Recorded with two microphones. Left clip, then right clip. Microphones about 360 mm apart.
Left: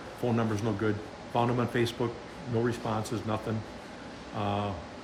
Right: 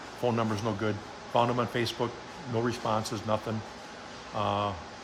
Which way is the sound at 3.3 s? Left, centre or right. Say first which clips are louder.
Right 3 dB; centre.